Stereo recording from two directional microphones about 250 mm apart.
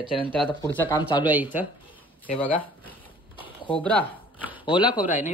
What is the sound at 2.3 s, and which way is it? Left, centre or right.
Speech, centre.